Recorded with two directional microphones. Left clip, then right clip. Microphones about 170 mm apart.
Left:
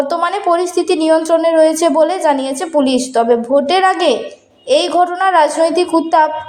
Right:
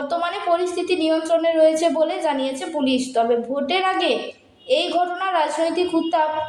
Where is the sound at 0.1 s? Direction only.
35° left (ahead or behind).